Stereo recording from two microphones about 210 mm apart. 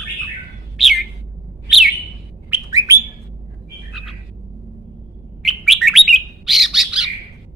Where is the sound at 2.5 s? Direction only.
15° right (ahead or behind).